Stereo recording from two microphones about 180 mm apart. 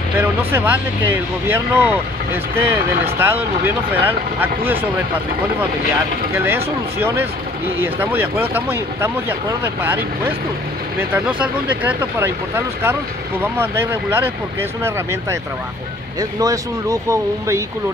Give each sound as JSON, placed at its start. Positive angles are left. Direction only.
{"t": 0.2, "sound": "speech", "side_deg": -10}
{"t": 6.3, "sound": "speech", "side_deg": -10}